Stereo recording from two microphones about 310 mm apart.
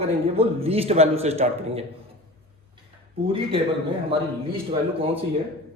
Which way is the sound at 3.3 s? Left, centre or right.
Centre.